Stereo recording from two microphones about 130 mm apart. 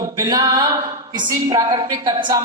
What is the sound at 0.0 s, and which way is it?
Music, 30° right (ahead or behind).